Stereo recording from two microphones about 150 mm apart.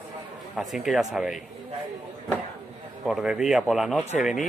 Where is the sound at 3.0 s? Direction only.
5° right (ahead or behind).